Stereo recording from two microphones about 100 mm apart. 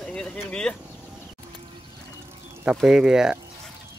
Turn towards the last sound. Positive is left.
turn(degrees=-5)  # may be behind; listen again after turning